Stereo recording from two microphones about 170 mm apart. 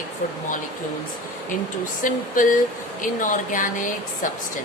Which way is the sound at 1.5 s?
50° left (ahead or behind).